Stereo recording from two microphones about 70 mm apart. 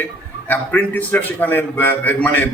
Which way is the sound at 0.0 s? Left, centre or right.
Left.